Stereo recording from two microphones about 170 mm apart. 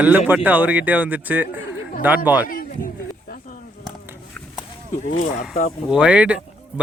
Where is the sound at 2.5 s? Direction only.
55° left (ahead or behind).